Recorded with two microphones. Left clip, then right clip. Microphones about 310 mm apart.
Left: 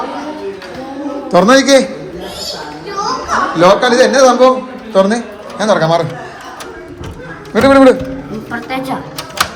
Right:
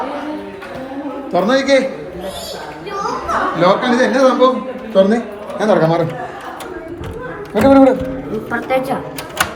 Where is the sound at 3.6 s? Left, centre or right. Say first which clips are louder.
Left 6 dB; centre.